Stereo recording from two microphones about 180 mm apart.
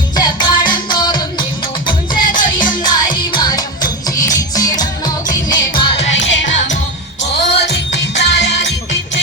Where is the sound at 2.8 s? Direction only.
25° left (ahead or behind).